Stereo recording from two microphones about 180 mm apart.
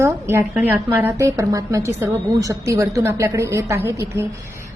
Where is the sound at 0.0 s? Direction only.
15° right (ahead or behind).